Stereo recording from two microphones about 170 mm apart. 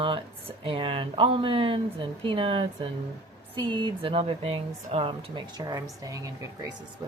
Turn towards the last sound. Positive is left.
turn(degrees=-20)  # may be behind; listen again after turning